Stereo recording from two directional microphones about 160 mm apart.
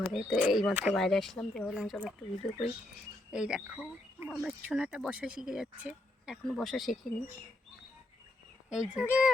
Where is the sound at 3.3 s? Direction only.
5° right (ahead or behind).